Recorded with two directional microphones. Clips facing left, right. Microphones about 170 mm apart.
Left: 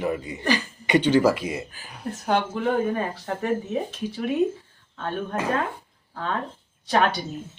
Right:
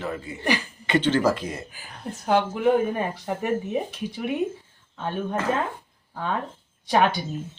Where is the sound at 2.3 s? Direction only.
10° right (ahead or behind).